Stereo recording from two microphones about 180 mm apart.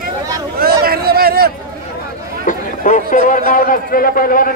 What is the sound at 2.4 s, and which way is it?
Chatter, 45° left (ahead or behind).